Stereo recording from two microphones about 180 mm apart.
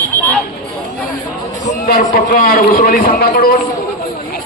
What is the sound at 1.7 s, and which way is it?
A man's voice, 50° left (ahead or behind).